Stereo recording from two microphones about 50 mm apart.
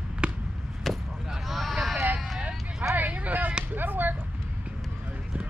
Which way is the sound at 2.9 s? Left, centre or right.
Right.